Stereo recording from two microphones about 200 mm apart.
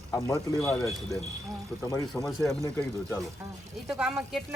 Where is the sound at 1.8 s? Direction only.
15° left (ahead or behind).